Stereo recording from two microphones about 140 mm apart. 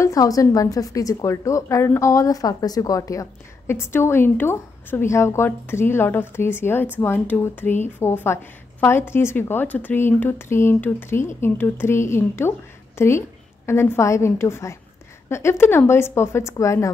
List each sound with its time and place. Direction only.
0.0 s a woman's voice: 25° left (ahead or behind)